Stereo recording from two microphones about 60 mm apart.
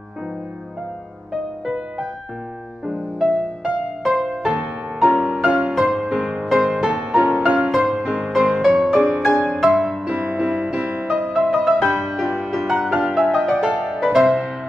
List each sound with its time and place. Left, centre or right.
2.9 s music: centre
5.0 s music: right
5.4 s music: centre
7.7 s music: centre
11.5 s music: centre